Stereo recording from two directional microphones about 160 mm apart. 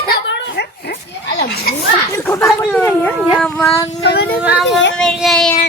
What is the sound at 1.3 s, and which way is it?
Speech, 85° left.